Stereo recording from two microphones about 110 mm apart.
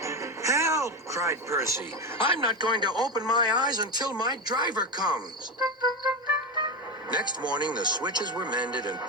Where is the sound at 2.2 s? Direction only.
45° left (ahead or behind).